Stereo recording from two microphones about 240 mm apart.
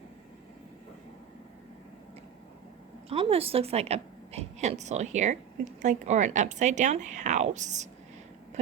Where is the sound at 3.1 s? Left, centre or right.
Right.